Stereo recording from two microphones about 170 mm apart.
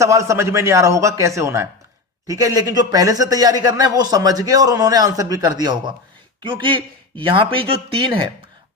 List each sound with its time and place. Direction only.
0.0 s a man's voice: 20° right (ahead or behind)